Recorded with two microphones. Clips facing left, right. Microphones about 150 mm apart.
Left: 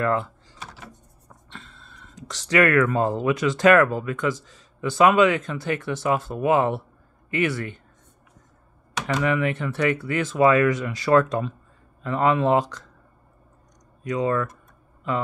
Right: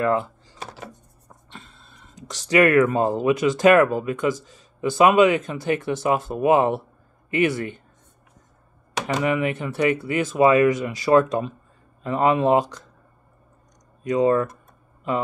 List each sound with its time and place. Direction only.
0.0 s speech: 15° right (ahead or behind)
1.5 s speech: 10° right (ahead or behind)
9.0 s speech: 15° right (ahead or behind)
14.0 s speech: 25° right (ahead or behind)